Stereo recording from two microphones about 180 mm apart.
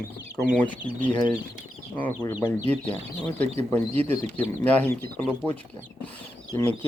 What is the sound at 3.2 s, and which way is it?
Speech, 10° left (ahead or behind).